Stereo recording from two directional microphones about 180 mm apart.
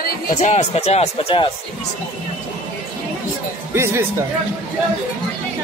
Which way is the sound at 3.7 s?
15° right (ahead or behind).